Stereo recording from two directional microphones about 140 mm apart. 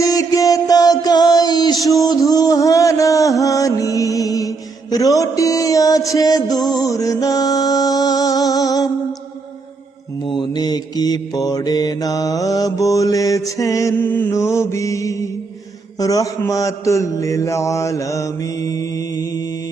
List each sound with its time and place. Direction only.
0.0 s music: 25° left (ahead or behind)
10.2 s mantra: 35° left (ahead or behind)